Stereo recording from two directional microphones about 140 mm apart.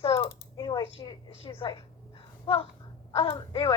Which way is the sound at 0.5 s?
25° left (ahead or behind).